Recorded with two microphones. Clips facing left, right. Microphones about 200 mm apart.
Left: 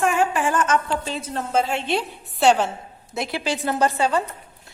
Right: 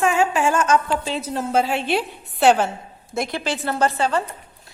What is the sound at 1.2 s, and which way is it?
A woman's voice, 10° right (ahead or behind).